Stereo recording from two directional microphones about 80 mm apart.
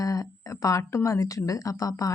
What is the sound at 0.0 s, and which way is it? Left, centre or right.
Speech, left.